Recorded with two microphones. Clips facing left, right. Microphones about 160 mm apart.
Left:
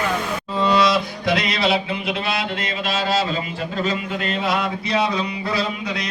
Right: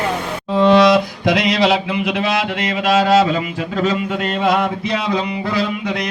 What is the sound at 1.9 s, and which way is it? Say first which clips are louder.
Music: right 5 dB; 65° right (ahead or behind).